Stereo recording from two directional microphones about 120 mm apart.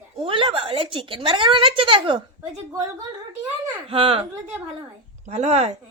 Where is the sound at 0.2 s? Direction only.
45° right (ahead or behind).